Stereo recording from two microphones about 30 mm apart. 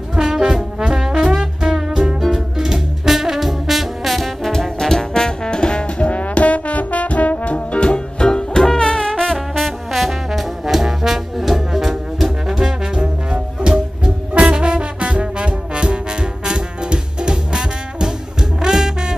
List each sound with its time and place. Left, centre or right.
0.1 s trombone: right
2.3 s music: centre
4.5 s brass instrument: centre; by 6.0 s left
6.0 s music: left; by 9.4 s centre
9.6 s music: centre
10.6 s music: centre
12.9 s music: right